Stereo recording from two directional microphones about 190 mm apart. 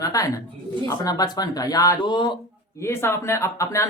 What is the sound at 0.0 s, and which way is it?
A man's voice, 20° left (ahead or behind).